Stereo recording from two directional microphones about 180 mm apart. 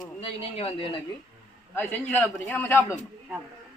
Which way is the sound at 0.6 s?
30° left (ahead or behind).